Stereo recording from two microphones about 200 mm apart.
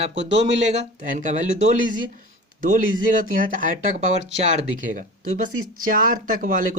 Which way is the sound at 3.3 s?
45° right (ahead or behind).